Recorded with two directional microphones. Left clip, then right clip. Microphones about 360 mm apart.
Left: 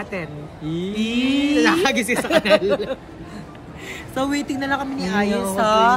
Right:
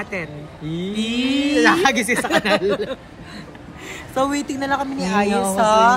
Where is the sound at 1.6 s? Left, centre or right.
Centre.